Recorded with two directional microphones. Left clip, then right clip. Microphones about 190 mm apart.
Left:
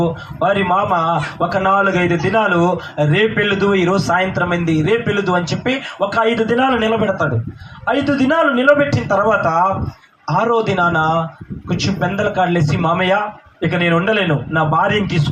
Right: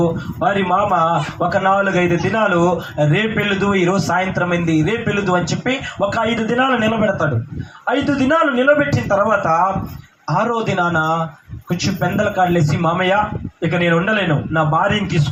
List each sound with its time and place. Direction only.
0.0 s a man's voice: 30° left (ahead or behind)